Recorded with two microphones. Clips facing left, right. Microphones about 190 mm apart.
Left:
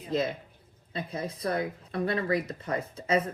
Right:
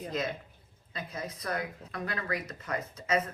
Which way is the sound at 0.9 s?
30° left (ahead or behind).